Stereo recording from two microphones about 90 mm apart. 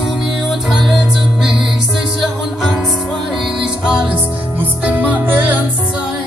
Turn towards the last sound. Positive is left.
turn(degrees=-20)  # may be behind; listen again after turning